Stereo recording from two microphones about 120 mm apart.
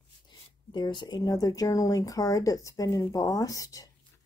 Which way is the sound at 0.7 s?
40° left (ahead or behind).